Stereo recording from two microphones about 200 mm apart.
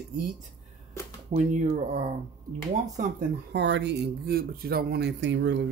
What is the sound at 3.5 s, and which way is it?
Speech, 60° right (ahead or behind).